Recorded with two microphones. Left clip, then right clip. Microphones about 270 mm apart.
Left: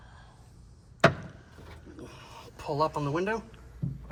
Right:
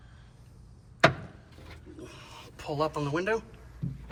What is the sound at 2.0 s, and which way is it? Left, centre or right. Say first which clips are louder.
Speech: even; left.